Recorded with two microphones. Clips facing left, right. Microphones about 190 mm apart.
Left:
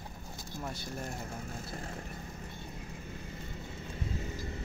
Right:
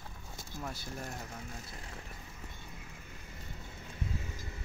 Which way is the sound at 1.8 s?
45° left (ahead or behind).